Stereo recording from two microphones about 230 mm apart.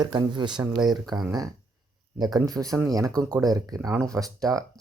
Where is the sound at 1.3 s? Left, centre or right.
Centre.